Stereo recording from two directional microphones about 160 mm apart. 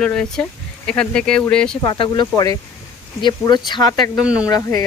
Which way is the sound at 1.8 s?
30° left (ahead or behind).